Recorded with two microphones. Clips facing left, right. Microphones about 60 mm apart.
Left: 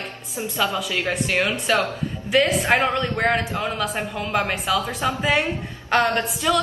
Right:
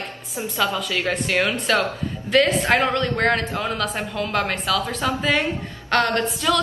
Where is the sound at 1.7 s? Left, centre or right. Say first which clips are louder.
Even; centre.